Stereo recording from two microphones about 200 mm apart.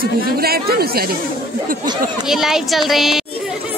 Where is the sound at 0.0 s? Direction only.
50° right (ahead or behind).